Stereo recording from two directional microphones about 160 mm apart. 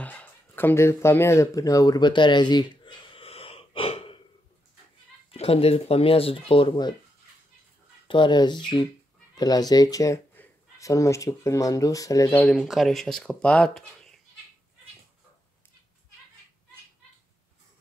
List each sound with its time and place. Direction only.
0.0 s a sound: 10° left (ahead or behind); by 4.2 s 35° left (ahead or behind)
5.3 s speech: 40° left (ahead or behind)
8.1 s speech: 30° left (ahead or behind); by 12.5 s 15° left (ahead or behind)
12.5 s speech: centre (ahead or behind)